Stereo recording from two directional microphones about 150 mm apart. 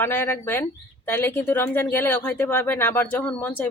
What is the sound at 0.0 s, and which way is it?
Speech, 15° left (ahead or behind).